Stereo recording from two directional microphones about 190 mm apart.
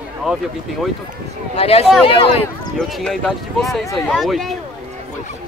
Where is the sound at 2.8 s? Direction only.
Centre (ahead or behind).